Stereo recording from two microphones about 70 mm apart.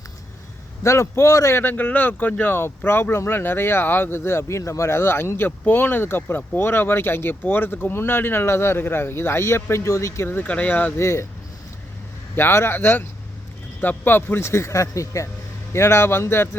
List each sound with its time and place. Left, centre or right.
0.8 s speech: left
10.4 s speech: left
10.9 s speech: left
12.4 s speech: left